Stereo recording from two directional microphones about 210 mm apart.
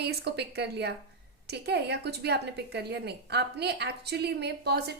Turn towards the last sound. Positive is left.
turn(degrees=-50)  # may be behind; listen again after turning